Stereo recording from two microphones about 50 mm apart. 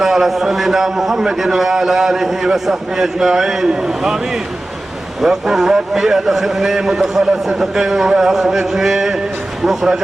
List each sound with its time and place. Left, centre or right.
0.0 s a man's voice: centre
5.2 s a man's voice: centre